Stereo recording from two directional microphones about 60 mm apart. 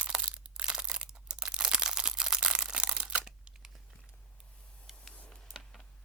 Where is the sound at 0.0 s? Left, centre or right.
Centre.